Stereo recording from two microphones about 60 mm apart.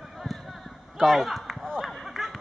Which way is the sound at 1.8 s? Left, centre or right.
Centre.